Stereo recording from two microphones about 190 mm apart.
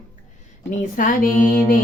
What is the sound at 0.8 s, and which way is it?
Music, 45° left (ahead or behind).